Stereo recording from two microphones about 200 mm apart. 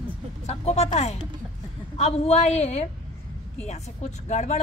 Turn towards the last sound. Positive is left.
turn(degrees=35)  # may be behind; listen again after turning